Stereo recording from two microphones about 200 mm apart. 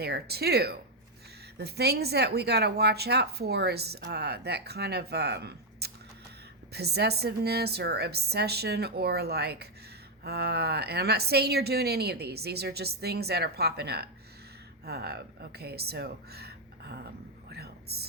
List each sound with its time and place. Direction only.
0.0 s speech: 55° right (ahead or behind)
17.5 s whispering: 50° right (ahead or behind)